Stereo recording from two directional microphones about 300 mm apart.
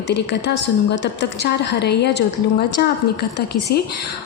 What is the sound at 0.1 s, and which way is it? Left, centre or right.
A woman's voice, left.